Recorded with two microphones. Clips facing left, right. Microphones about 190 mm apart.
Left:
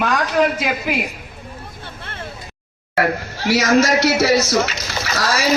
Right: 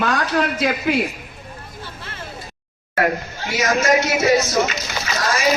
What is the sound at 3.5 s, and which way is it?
Speech, 80° left.